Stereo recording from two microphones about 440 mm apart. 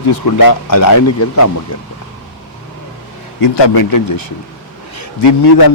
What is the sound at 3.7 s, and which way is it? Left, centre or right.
A man's voice, left.